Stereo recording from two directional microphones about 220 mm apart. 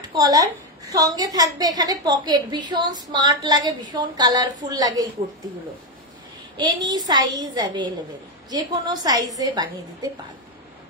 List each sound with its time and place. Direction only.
0.1 s a woman's voice: 15° right (ahead or behind)
6.5 s a woman's voice: 20° right (ahead or behind)